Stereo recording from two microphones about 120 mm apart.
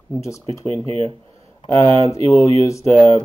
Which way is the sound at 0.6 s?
50° right (ahead or behind).